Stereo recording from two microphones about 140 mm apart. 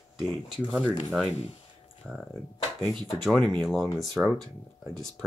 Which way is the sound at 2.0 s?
Centre (ahead or behind).